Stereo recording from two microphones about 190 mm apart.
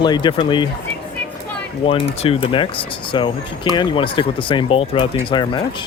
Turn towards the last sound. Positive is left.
turn(degrees=25)  # may be behind; listen again after turning